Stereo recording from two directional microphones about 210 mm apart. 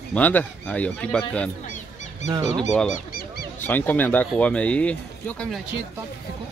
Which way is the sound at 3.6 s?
10° left (ahead or behind).